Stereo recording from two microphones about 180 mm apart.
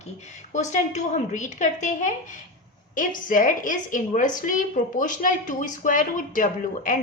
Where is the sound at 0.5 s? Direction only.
40° left (ahead or behind).